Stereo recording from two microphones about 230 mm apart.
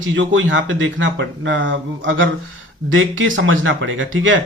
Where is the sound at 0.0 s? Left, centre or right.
Right.